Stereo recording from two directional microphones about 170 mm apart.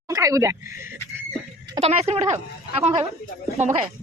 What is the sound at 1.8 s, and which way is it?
Speech, 35° right (ahead or behind).